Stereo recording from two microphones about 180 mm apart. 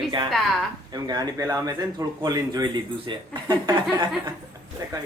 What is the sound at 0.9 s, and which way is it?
A man's voice, 20° right (ahead or behind).